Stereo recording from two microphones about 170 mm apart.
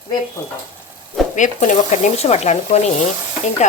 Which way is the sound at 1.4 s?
45° left (ahead or behind).